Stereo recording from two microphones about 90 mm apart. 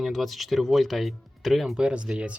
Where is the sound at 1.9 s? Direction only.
10° right (ahead or behind).